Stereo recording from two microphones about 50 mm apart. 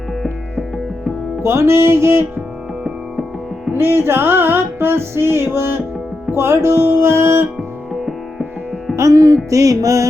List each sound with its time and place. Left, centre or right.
1.4 s music: right
3.7 s music: right
9.0 s music: right